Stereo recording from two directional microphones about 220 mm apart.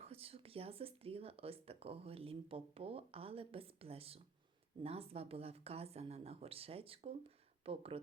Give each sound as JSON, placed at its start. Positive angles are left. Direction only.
{"t": 0.0, "sound": "speech", "side_deg": -25}